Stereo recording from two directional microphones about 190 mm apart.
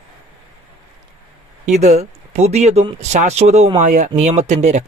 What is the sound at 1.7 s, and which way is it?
Speech, 35° right (ahead or behind).